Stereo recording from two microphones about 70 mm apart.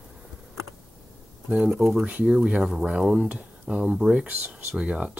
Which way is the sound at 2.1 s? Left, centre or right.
Centre.